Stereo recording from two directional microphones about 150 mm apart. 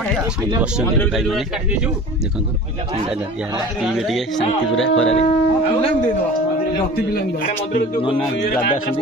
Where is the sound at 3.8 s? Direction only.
Centre (ahead or behind).